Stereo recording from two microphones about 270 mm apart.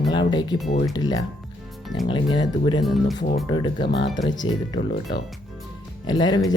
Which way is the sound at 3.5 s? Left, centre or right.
Centre.